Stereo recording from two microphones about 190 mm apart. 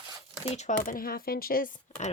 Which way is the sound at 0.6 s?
40° left (ahead or behind).